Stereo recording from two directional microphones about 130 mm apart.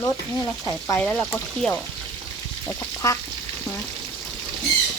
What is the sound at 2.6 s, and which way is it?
Duck, 20° left (ahead or behind).